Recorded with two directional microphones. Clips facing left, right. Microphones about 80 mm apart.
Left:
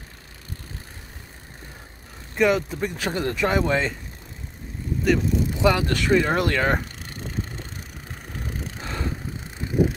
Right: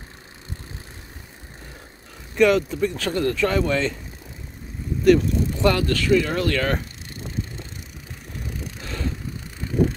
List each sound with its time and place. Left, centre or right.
2.4 s speech: centre; by 3.8 s left
5.0 s speech: centre
5.9 s speech: left